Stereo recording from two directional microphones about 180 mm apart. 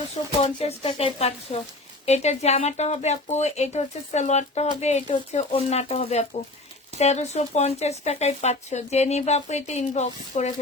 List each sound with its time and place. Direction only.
0.4 s speech: 35° left (ahead or behind)